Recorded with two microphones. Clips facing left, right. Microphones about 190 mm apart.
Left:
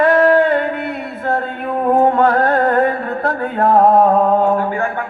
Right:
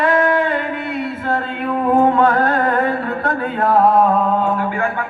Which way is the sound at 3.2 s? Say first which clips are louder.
Left 5 dB; 30° left (ahead or behind).